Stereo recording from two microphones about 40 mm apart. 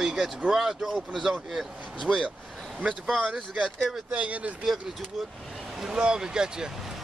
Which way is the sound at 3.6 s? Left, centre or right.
Centre.